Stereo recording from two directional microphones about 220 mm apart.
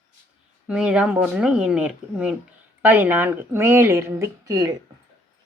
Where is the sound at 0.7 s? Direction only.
5° right (ahead or behind).